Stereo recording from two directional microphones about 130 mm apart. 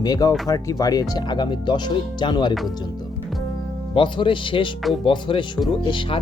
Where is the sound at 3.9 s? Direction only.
40° left (ahead or behind).